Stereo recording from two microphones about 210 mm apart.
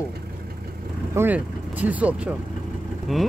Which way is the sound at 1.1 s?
10° right (ahead or behind).